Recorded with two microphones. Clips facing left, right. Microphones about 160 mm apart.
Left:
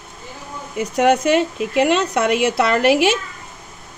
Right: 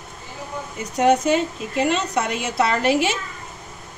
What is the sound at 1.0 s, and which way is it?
Speech, 75° left (ahead or behind).